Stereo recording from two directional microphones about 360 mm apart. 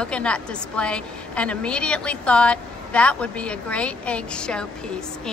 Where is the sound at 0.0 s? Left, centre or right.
Centre.